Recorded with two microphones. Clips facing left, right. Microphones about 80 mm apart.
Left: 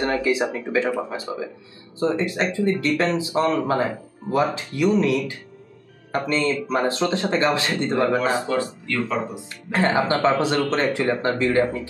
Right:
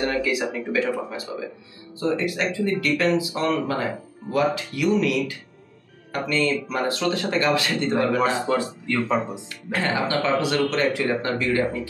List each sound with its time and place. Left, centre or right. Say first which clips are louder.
0.0 s speech: left 2 dB; left
8.5 s speech: even; centre
9.7 s speech: left 4 dB; left